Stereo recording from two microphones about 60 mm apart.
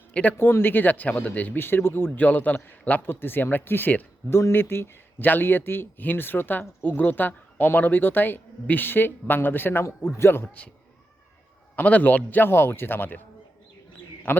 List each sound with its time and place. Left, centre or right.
0.1 s speech: left
0.3 s speech: left
4.3 s speech: left
9.8 s a man's voice: left
11.8 s speech: left
14.3 s speech: left